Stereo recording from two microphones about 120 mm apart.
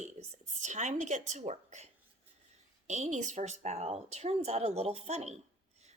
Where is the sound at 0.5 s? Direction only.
90° right; by 5.3 s 65° right (ahead or behind).